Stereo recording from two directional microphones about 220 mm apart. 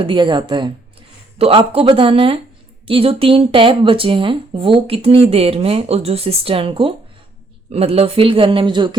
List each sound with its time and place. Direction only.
0.0 s speech: 20° right (ahead or behind)